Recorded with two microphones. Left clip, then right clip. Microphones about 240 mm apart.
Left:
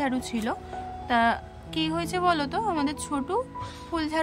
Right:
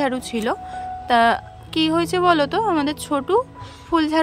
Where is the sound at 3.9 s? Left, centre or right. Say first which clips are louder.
Right 10 dB; centre.